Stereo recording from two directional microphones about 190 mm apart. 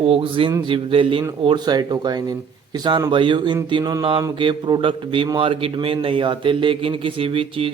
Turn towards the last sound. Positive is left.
turn(degrees=-30)  # may be behind; listen again after turning